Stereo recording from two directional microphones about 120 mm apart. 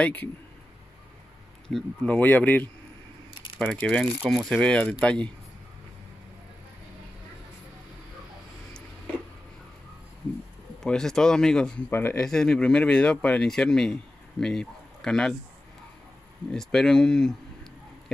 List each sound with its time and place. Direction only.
0.0 s speech: 15° left (ahead or behind)
1.7 s speech: 5° left (ahead or behind)
10.8 s speech: 5° left (ahead or behind)
11.9 s speech: 20° left (ahead or behind)
12.3 s speech: 5° left (ahead or behind)
16.5 s speech: 5° left (ahead or behind)